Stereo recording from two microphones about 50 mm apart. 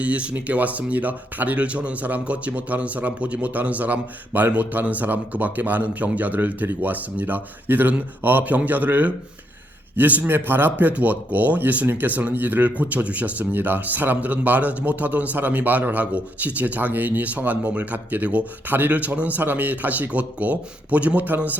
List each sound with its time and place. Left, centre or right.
0.0 s a man's voice: right
13.4 s a man's voice: right